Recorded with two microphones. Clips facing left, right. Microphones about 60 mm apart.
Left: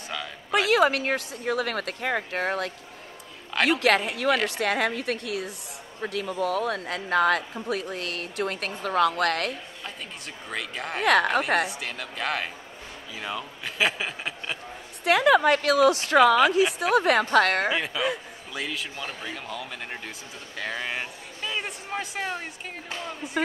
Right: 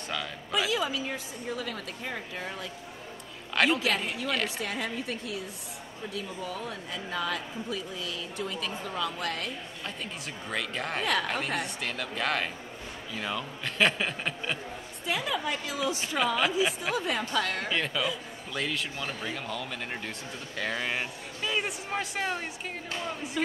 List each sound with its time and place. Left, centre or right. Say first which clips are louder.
0.5 s a woman's voice: left 9 dB; left
3.8 s a woman's voice: left 8 dB; left
10.5 s speech: even; centre
11.0 s a woman's voice: left 9 dB; left
11.8 s speech: even; centre
15.0 s a woman's voice: left 12 dB; left
17.7 s speech: left 3 dB; centre